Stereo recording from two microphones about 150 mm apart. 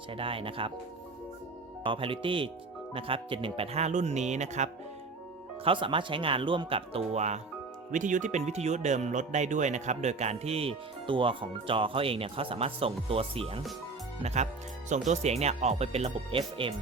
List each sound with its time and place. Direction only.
0.1 s speech: 35° right (ahead or behind)
1.8 s speech: 35° right (ahead or behind)
5.6 s speech: 35° right (ahead or behind)
7.9 s speech: 60° right (ahead or behind); by 16.7 s 35° right (ahead or behind)